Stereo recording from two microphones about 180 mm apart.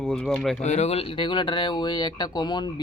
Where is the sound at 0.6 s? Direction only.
40° left (ahead or behind).